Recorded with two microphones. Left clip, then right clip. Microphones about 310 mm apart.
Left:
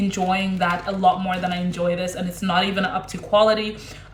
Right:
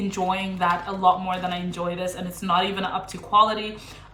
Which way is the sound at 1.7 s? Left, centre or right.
Right.